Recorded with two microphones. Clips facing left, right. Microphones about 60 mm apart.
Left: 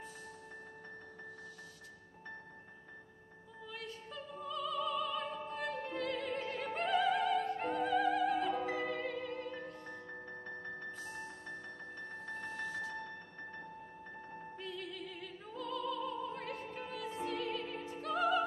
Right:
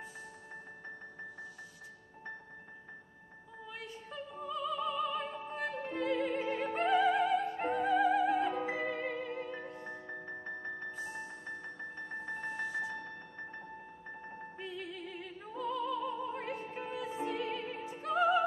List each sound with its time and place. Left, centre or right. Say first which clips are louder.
3.6 s opera: even; centre
14.6 s music: right 2 dB; centre
15.1 s opera: right 3 dB; centre
17.9 s music: right 4 dB; centre